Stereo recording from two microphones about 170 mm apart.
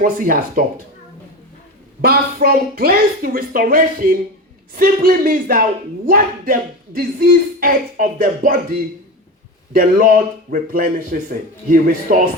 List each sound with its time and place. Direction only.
0.0 s speech: 55° right (ahead or behind)
2.0 s speech: 60° right (ahead or behind)